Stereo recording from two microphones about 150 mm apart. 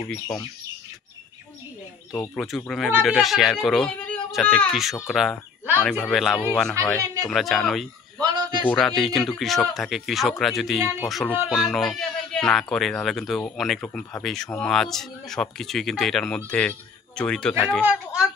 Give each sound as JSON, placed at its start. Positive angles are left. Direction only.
{"t": 2.1, "sound": "speech", "side_deg": 0}
{"t": 6.8, "sound": "speech", "side_deg": -20}
{"t": 7.2, "sound": "speech", "side_deg": 0}
{"t": 8.2, "sound": "a sound", "side_deg": -30}
{"t": 8.6, "sound": "speech", "side_deg": 0}
{"t": 13.7, "sound": "speech", "side_deg": 15}
{"t": 14.2, "sound": "speech", "side_deg": 0}
{"t": 17.8, "sound": "a sound", "side_deg": -5}